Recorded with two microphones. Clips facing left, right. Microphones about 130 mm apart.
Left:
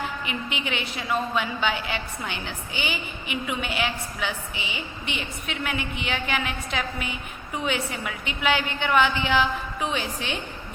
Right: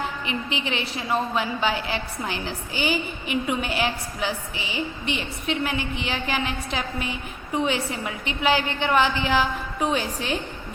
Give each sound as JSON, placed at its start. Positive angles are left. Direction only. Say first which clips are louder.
{"t": 0.3, "sound": "a woman's voice", "louder": "right 2 dB", "side_deg": -30}